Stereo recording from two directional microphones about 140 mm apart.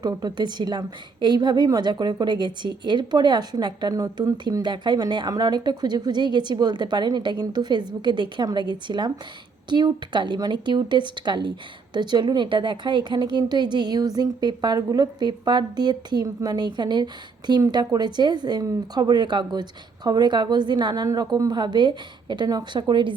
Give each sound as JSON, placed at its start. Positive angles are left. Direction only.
{"t": 0.0, "sound": "a woman's voice", "side_deg": -30}